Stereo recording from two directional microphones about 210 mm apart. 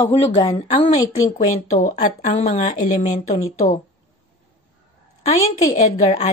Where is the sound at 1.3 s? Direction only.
35° left (ahead or behind).